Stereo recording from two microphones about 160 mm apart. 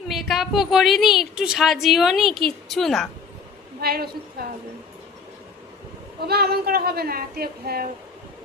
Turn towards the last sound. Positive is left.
turn(degrees=-70)  # may be behind; listen again after turning